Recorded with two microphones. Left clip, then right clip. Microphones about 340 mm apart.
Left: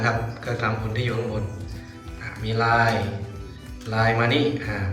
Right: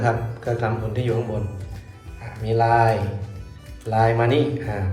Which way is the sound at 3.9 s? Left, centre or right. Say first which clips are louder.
Right 2 dB; centre.